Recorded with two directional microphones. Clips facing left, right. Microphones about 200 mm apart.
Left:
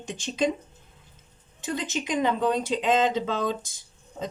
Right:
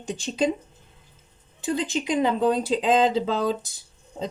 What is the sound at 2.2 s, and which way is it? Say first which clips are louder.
Speech: right 2 dB; 35° right (ahead or behind).